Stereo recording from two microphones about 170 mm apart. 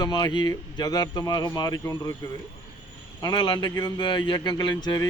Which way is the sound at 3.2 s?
25° left (ahead or behind).